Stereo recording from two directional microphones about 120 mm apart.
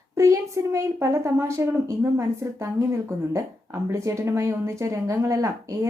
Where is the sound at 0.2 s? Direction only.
25° right (ahead or behind).